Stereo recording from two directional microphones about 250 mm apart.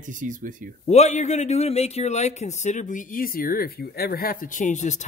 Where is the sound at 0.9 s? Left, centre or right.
Left.